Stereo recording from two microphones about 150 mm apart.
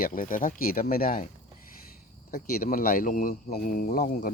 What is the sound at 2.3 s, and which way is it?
Speech, 70° left (ahead or behind).